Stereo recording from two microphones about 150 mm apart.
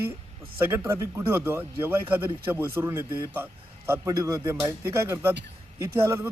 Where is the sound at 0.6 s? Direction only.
15° right (ahead or behind).